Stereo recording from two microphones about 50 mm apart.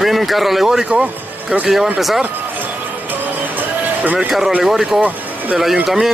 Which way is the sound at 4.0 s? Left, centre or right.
Right.